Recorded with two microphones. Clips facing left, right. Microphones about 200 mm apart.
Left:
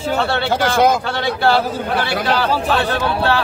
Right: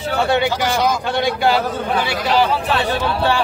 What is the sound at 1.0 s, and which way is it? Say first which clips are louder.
A man's voice: right 1 dB; 15° right (ahead or behind).